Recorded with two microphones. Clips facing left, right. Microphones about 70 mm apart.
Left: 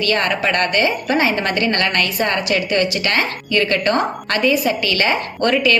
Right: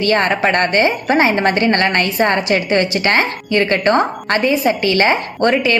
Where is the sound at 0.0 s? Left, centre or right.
Right.